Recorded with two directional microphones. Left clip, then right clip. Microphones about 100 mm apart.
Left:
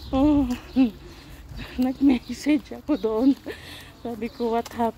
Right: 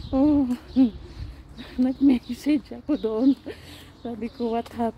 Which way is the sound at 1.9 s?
30° right (ahead or behind).